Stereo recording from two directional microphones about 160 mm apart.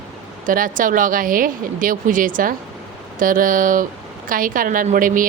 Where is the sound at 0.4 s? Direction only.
55° right (ahead or behind).